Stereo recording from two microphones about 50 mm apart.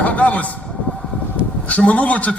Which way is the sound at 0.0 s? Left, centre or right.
Left.